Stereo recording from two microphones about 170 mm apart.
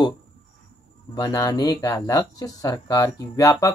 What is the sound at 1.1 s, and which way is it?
Speech, 20° left (ahead or behind).